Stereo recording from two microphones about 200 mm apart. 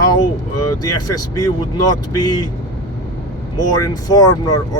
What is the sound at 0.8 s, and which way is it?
Speech, 20° left (ahead or behind).